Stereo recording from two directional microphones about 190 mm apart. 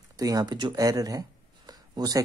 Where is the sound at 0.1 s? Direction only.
20° right (ahead or behind).